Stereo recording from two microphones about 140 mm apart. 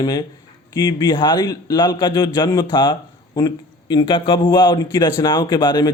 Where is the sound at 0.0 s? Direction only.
30° left (ahead or behind).